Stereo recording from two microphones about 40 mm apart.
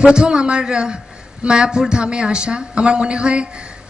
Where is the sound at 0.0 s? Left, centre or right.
Right.